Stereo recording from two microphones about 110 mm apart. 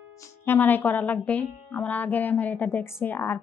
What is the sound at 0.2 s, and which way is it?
Speech, 20° left (ahead or behind).